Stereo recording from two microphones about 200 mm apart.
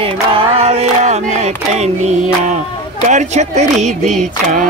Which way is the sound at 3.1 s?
35° right (ahead or behind).